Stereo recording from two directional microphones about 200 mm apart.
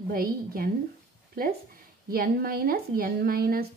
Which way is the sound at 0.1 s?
45° right (ahead or behind).